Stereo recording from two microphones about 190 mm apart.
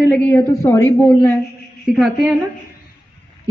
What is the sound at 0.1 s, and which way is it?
A man's voice, 10° left (ahead or behind).